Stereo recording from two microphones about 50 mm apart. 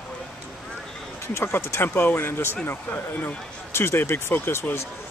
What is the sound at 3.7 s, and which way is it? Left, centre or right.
Speech, left.